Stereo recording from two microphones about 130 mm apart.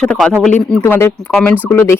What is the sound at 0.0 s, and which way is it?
Speech, 5° left (ahead or behind).